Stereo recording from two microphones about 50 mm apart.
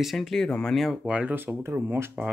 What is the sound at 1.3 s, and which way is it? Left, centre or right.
Speech, right.